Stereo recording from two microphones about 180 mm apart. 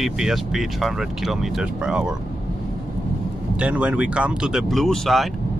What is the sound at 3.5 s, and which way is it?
Speech, 5° right (ahead or behind).